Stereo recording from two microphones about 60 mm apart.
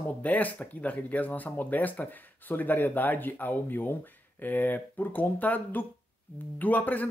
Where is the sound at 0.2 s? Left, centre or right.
Left.